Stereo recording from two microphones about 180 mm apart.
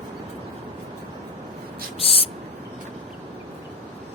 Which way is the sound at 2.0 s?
35° left (ahead or behind).